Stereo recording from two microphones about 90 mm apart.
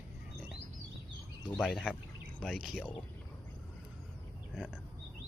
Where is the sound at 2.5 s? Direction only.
5° right (ahead or behind).